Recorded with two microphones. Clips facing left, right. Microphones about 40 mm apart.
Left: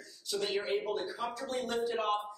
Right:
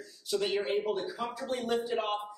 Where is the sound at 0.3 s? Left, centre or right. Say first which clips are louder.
Right 3 dB; centre.